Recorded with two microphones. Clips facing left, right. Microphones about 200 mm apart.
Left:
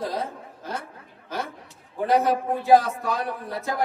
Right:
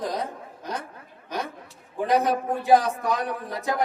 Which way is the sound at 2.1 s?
15° right (ahead or behind).